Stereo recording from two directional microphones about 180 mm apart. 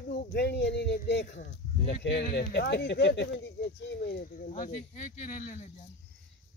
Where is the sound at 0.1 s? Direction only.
60° left (ahead or behind).